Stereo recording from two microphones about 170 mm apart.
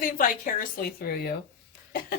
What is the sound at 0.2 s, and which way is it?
Speech, 55° left (ahead or behind).